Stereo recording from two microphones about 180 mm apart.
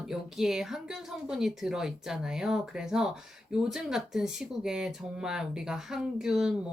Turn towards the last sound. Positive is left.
turn(degrees=0)  # may be behind; listen again after turning